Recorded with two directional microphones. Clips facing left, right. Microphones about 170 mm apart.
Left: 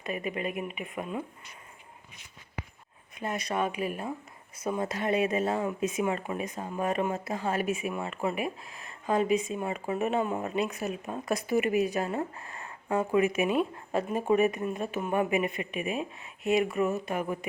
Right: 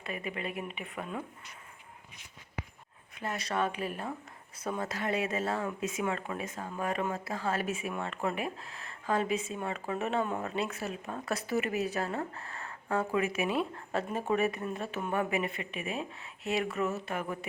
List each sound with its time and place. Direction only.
0.3 s speech: 15° left (ahead or behind)
3.2 s speech: 15° left (ahead or behind)